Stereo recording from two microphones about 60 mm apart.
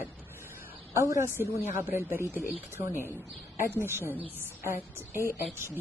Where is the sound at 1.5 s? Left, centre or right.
Right.